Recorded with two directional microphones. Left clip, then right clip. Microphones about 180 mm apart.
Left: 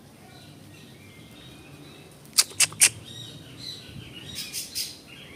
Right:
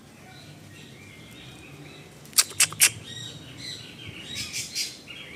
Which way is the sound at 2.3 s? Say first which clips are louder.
Even; 5° left (ahead or behind).